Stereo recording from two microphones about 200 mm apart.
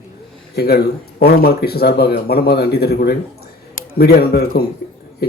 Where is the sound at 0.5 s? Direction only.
50° left (ahead or behind).